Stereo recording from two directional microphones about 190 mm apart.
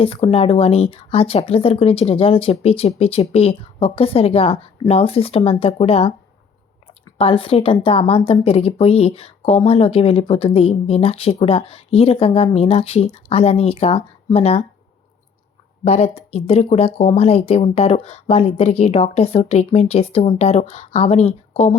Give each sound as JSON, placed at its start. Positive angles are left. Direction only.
{"t": 0.0, "sound": "speech", "side_deg": 30}
{"t": 7.2, "sound": "speech", "side_deg": 30}
{"t": 15.8, "sound": "speech", "side_deg": 35}